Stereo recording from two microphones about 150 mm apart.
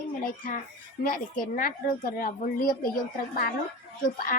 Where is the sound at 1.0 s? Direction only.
65° left (ahead or behind).